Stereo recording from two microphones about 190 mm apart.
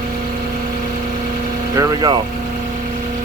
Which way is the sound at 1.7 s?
20° right (ahead or behind).